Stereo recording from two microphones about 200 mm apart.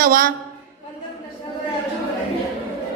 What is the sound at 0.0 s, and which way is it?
Speech, 45° right (ahead or behind).